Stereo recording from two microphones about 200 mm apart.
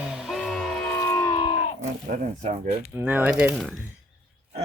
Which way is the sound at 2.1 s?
35° right (ahead or behind).